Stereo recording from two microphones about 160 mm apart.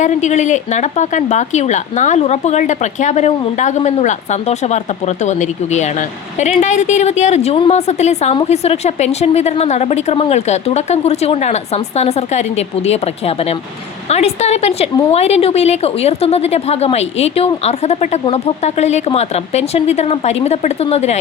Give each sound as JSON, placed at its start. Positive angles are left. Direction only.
{"t": 0.0, "sound": "a woman's voice", "side_deg": 50}